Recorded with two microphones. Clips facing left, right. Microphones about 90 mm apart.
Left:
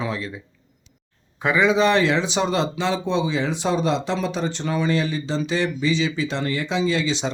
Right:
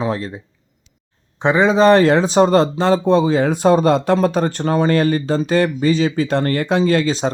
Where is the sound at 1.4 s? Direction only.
35° right (ahead or behind).